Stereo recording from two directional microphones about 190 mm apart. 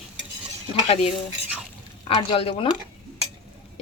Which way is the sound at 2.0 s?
30° left (ahead or behind).